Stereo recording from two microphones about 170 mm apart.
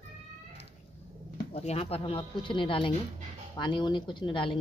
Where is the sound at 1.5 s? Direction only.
35° left (ahead or behind).